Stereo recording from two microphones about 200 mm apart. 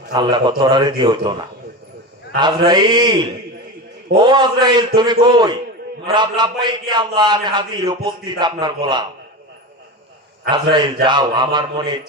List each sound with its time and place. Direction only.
0.1 s a man's voice: 20° right (ahead or behind)
2.4 s a man's voice: 20° right (ahead or behind)
4.2 s a man's voice: 20° right (ahead or behind)
10.5 s a man's voice: 25° right (ahead or behind)